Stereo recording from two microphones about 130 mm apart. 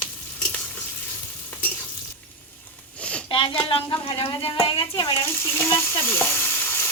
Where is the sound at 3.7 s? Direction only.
40° left (ahead or behind).